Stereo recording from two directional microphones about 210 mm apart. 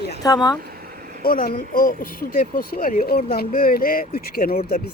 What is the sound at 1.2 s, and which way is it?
Speech, 45° left (ahead or behind).